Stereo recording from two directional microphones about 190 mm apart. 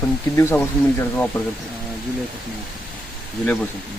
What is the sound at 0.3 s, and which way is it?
Speech, 10° left (ahead or behind).